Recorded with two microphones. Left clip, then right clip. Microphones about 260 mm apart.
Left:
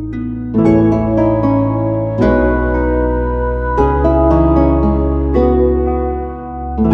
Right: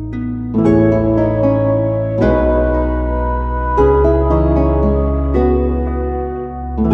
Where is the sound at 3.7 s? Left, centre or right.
Centre.